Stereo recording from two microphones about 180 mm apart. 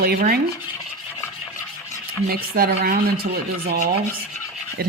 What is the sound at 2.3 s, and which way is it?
Rub, 55° right (ahead or behind).